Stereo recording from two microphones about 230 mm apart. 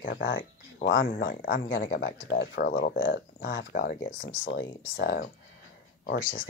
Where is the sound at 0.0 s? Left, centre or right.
Left.